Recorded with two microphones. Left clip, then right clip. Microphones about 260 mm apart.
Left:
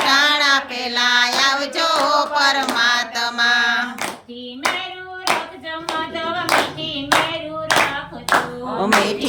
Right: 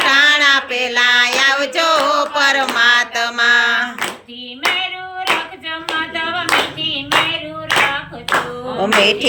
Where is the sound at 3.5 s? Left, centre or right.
Right.